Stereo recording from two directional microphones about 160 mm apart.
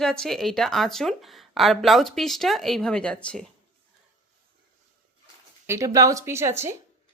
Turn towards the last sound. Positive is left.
turn(degrees=-15)  # may be behind; listen again after turning